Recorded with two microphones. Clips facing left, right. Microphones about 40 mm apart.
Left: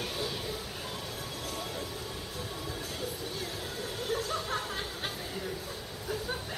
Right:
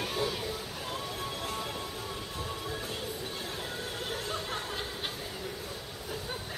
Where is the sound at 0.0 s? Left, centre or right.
Centre.